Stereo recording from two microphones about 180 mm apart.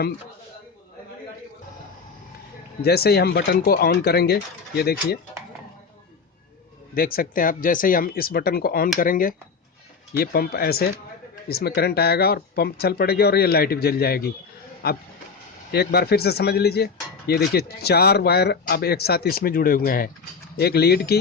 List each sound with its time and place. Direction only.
2.8 s speech: 60° left (ahead or behind)
6.9 s speech: 55° left (ahead or behind)